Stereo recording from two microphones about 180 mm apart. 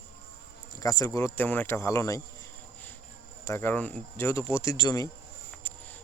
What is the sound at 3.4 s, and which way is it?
Speech, 15° left (ahead or behind).